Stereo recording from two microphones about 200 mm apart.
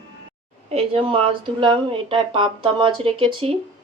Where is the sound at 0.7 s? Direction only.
30° right (ahead or behind).